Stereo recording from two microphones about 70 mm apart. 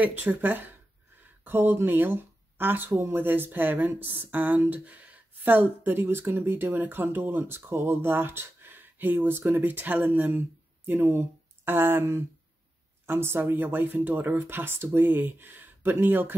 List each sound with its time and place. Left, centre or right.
0.0 s speech: right